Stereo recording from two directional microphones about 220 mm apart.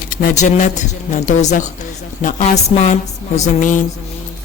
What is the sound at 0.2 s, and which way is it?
A woman's voice, 35° left (ahead or behind).